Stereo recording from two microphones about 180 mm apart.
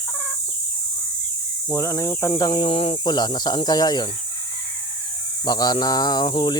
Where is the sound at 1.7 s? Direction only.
15° left (ahead or behind).